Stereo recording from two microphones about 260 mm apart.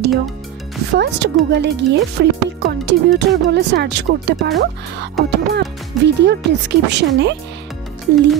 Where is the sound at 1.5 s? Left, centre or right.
Right.